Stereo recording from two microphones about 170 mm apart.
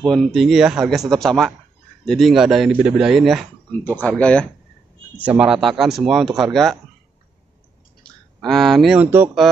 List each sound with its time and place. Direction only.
0.0 s speech: centre (ahead or behind)
3.7 s speech: 10° left (ahead or behind)
5.1 s speech: 10° right (ahead or behind)
8.0 s speech: centre (ahead or behind)